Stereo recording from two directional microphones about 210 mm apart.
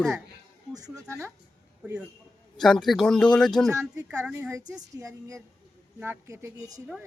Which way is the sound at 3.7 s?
15° right (ahead or behind).